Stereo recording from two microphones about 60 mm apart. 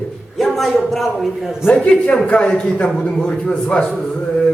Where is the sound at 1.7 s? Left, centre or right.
Left.